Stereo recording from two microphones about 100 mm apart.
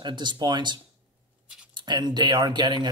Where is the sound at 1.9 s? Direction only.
45° right (ahead or behind).